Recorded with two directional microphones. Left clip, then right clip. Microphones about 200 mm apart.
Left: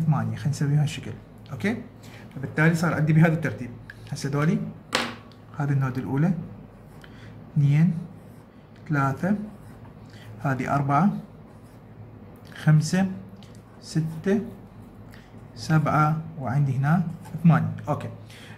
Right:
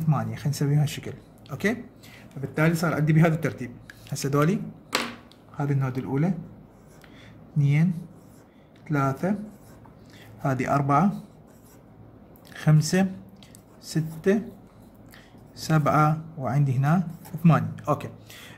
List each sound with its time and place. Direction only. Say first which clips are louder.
0.1 s speech: right 3 dB; 40° right (ahead or behind)
5.6 s speech: even; 30° right (ahead or behind)
7.6 s speech: left 1 dB; 30° right (ahead or behind)
10.4 s speech: right 1 dB; 40° right (ahead or behind)
12.5 s speech: right 1 dB; 40° right (ahead or behind)
15.5 s speech: right 1 dB; 40° right (ahead or behind)